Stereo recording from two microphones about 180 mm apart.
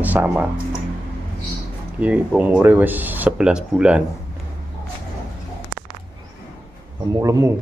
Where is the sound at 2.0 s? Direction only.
5° right (ahead or behind).